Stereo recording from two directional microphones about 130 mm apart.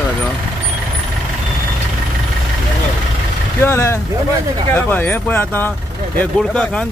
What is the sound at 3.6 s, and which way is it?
Speech, 20° left (ahead or behind).